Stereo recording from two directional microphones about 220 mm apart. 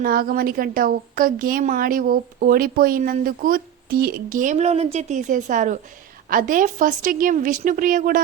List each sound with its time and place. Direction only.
0.0 s a woman's voice: 40° right (ahead or behind)